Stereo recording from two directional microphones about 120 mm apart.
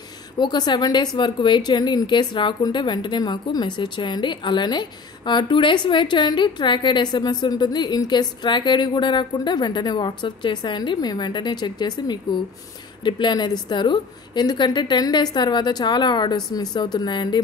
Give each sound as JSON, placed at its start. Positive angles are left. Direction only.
{"t": 0.4, "sound": "a woman's voice", "side_deg": 35}